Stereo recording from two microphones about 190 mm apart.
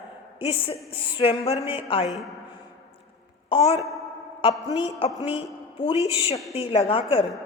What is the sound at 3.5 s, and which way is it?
Speech, 30° left (ahead or behind).